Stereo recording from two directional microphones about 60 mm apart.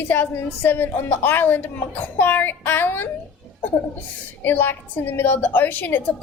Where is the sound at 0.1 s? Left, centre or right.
Left.